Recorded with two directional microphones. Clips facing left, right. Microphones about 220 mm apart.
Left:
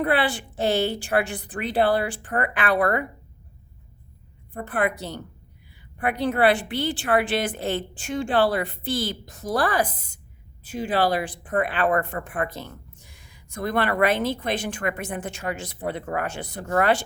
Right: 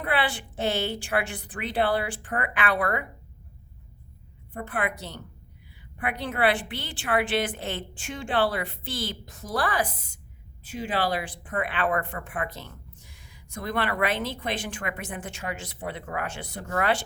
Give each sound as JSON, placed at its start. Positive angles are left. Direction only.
{"t": 0.1, "sound": "speech", "side_deg": 40}
{"t": 4.6, "sound": "speech", "side_deg": 40}